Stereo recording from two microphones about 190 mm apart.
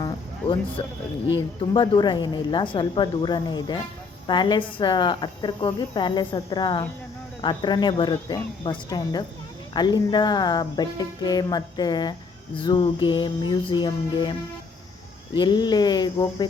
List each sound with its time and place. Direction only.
0.0 s music: 30° left (ahead or behind)
1.7 s speech: 25° left (ahead or behind)
15.4 s speech: 25° left (ahead or behind)